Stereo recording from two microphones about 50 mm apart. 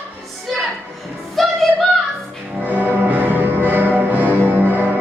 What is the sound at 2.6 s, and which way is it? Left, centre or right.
Music, right.